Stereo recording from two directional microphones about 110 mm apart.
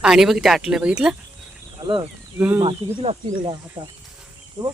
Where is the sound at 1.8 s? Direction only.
30° right (ahead or behind).